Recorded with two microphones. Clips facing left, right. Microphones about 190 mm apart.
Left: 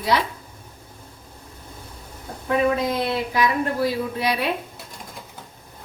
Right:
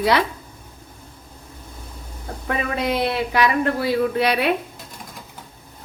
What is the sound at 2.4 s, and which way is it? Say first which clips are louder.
Speech: left 3 dB; 70° right (ahead or behind).